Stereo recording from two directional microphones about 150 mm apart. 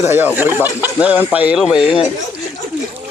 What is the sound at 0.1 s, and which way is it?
Speech, 10° right (ahead or behind).